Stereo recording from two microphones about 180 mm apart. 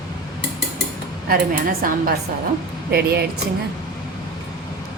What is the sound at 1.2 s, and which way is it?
A woman's voice, 55° right (ahead or behind).